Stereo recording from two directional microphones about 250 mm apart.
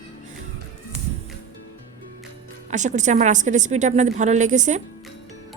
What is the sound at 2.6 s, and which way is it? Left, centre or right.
A woman's voice, right.